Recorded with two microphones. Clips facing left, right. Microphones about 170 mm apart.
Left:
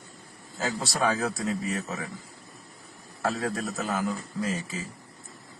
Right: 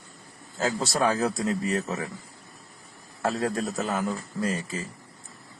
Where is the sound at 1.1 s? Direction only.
Centre (ahead or behind).